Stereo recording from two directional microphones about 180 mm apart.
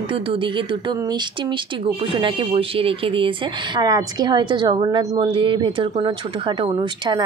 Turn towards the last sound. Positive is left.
turn(degrees=-25)  # may be behind; listen again after turning